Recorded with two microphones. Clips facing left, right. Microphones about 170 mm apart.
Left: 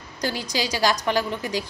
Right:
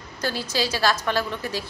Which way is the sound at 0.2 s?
15° left (ahead or behind).